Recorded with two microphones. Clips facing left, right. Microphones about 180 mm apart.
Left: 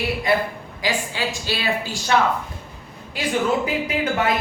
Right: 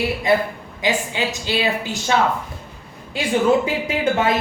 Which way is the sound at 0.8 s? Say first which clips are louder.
Right 3 dB; 20° right (ahead or behind).